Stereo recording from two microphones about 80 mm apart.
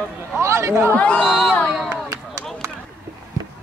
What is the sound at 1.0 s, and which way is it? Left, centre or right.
Speech, centre.